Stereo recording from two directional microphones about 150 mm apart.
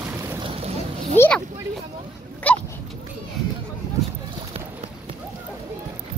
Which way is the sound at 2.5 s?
10° left (ahead or behind).